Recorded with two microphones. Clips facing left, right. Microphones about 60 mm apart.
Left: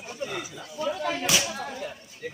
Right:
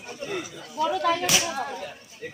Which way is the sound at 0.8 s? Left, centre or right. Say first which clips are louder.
Right 5 dB; right.